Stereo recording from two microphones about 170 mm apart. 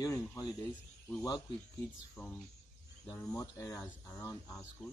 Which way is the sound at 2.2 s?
15° left (ahead or behind).